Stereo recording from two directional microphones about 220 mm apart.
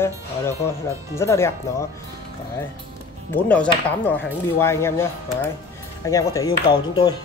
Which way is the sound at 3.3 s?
5° left (ahead or behind).